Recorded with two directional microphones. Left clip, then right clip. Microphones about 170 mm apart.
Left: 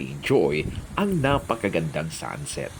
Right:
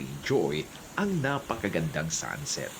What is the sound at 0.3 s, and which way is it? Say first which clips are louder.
Speech: left 6 dB; 20° left (ahead or behind).